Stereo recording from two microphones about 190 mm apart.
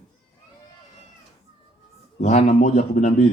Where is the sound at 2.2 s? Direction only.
35° left (ahead or behind).